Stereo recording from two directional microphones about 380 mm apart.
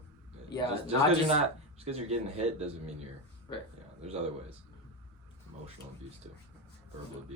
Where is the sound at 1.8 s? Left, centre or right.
Centre.